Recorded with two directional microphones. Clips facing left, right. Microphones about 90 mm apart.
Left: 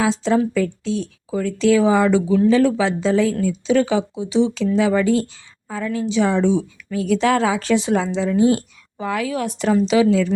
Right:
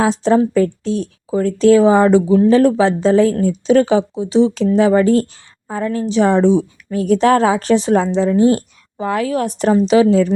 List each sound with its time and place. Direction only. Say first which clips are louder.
0.0 s a woman's voice: right 4 dB; 45° right (ahead or behind)
2.5 s a woman's voice: right 4 dB; 45° right (ahead or behind)